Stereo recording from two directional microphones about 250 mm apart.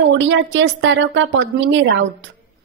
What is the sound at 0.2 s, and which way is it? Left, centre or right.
A woman's voice, right.